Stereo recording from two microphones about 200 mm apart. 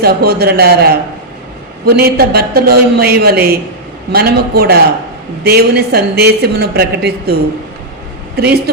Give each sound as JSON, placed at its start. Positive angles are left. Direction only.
{"t": 0.0, "sound": "a man's voice", "side_deg": -50}
{"t": 8.4, "sound": "a man's voice", "side_deg": -55}